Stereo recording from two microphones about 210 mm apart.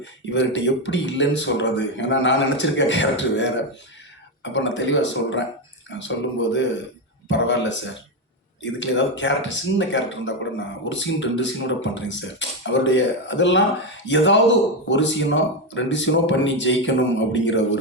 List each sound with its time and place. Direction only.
0.3 s speech: 60° left (ahead or behind)